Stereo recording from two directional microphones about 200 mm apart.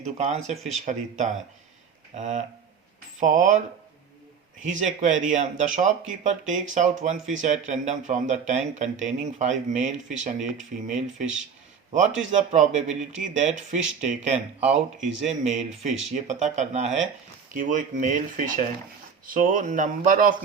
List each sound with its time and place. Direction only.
0.0 s speech: 35° right (ahead or behind)
4.6 s speech: 40° right (ahead or behind)
11.9 s speech: 35° right (ahead or behind)
15.9 s speech: centre (ahead or behind)
16.1 s speech: 35° right (ahead or behind)